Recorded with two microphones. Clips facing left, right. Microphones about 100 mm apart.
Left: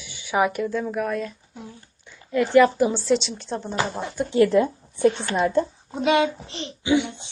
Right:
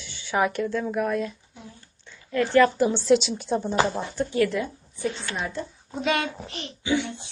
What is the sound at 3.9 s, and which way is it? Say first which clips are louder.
Speech: left 1 dB; 5° left (ahead or behind).